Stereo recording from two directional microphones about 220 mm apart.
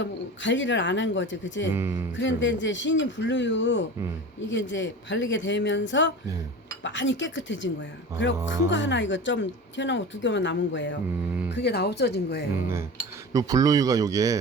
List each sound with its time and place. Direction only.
0.0 s speech: 55° left (ahead or behind)
1.7 s speech: 10° right (ahead or behind)
2.1 s speech: 55° left (ahead or behind)
13.3 s speech: 15° right (ahead or behind)